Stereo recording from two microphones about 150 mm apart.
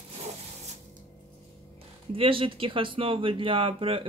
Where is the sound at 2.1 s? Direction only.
35° right (ahead or behind).